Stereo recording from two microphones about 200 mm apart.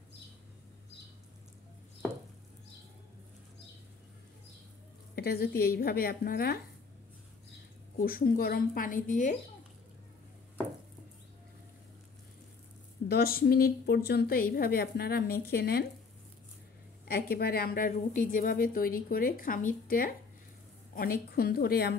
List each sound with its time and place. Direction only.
5.1 s a woman's voice: 50° left (ahead or behind)
8.0 s a woman's voice: 45° left (ahead or behind)
13.1 s a woman's voice: 50° left (ahead or behind)
17.1 s a woman's voice: 50° left (ahead or behind)